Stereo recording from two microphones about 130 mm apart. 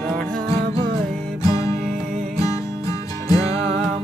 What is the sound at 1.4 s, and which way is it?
Music, 25° left (ahead or behind).